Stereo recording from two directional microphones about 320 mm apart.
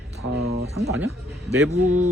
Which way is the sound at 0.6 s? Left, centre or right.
Centre.